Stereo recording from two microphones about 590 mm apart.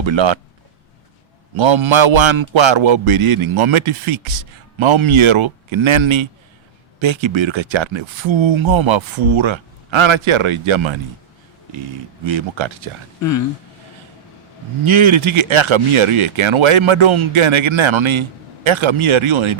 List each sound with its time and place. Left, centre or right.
0.0 s speech: right
1.5 s speech: right
14.8 s speech: right